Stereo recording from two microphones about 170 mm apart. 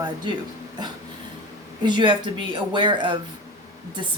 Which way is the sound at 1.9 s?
30° right (ahead or behind).